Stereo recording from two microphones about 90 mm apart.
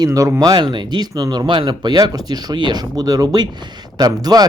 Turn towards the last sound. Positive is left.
turn(degrees=-45)  # may be behind; listen again after turning